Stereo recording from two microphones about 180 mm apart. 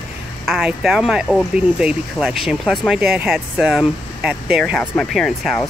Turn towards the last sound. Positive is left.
turn(degrees=5)  # may be behind; listen again after turning